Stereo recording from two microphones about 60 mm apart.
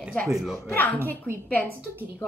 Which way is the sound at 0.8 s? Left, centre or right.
Left.